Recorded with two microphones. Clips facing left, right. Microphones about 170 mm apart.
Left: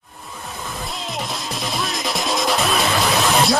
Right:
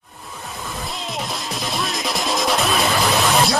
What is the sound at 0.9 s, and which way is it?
Music, centre (ahead or behind).